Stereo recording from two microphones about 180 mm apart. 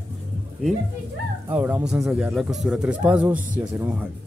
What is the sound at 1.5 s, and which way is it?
Speech, 10° right (ahead or behind).